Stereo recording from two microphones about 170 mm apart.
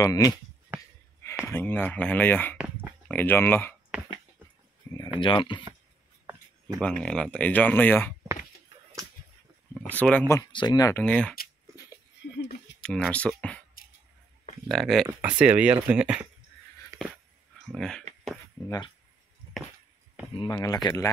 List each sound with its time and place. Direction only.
0.0 s speech: 20° left (ahead or behind)
1.4 s speech: 10° left (ahead or behind)
2.5 s a sound: 5° right (ahead or behind)
3.1 s speech: 10° left (ahead or behind)
4.9 s a sound: 10° left (ahead or behind)
5.2 s speech: 30° left (ahead or behind)
6.3 s writing: 15° right (ahead or behind)
6.8 s speech: 5° left (ahead or behind)
9.8 s speech: 10° left (ahead or behind)
12.8 s speech: 5° left (ahead or behind)
14.7 s speech: centre (ahead or behind)
17.6 s speech: 5° left (ahead or behind)
20.3 s speech: 20° left (ahead or behind)